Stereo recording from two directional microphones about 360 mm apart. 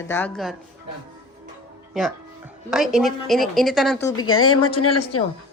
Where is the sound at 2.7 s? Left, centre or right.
Centre.